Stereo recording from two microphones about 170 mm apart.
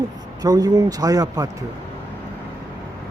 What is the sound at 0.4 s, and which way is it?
Speech, 20° right (ahead or behind).